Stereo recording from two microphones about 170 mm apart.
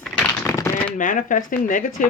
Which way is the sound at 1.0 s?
50° left (ahead or behind).